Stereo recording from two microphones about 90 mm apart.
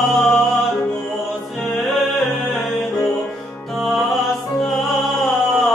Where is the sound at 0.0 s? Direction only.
5° left (ahead or behind).